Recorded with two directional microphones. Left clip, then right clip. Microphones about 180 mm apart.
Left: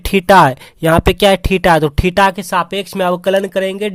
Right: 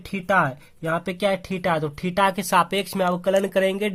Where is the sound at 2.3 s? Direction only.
20° left (ahead or behind).